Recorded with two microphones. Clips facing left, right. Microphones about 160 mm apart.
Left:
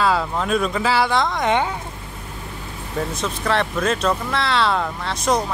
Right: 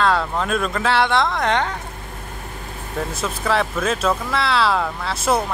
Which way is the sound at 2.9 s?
5° right (ahead or behind).